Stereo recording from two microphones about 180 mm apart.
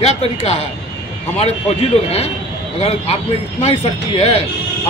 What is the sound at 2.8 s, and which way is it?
Speech, 35° left (ahead or behind).